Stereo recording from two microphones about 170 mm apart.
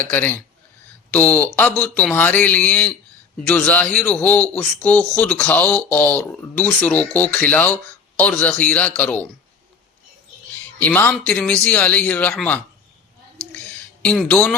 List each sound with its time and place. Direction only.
0.1 s a man's voice: 10° left (ahead or behind)
10.8 s a man's voice: 10° left (ahead or behind)
14.0 s a man's voice: 5° left (ahead or behind)